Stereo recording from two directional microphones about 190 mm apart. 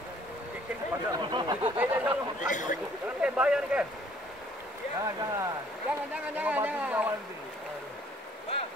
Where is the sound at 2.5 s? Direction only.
40° left (ahead or behind).